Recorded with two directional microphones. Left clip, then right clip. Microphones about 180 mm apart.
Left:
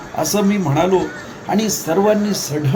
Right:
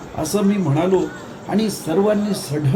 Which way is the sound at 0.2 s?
15° left (ahead or behind).